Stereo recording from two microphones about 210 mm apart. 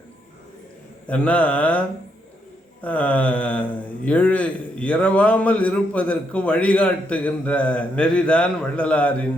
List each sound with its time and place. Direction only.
1.0 s speech: 5° left (ahead or behind)
2.8 s speech: 5° left (ahead or behind)